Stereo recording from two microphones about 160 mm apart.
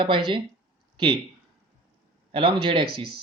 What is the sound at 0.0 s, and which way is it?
Speech, 30° right (ahead or behind).